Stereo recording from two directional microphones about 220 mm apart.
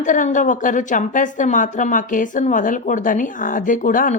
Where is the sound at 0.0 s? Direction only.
35° left (ahead or behind).